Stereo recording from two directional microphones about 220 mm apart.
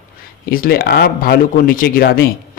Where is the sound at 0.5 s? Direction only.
45° left (ahead or behind).